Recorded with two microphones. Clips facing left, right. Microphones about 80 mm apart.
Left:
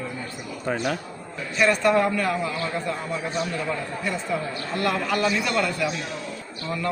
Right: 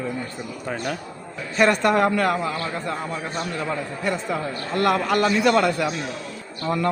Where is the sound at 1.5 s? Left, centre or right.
Right.